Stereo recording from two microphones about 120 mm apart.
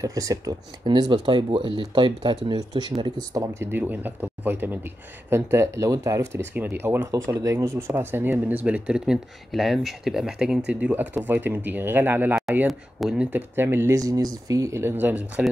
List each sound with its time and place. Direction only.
0.0 s speech: 30° right (ahead or behind)
6.5 s speech: 15° right (ahead or behind)
12.6 s speech: 5° right (ahead or behind)